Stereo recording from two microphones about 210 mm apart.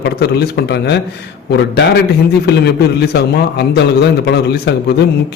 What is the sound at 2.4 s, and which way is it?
A man's voice, 50° left (ahead or behind).